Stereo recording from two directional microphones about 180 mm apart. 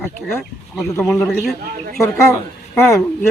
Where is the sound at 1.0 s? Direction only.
Centre (ahead or behind).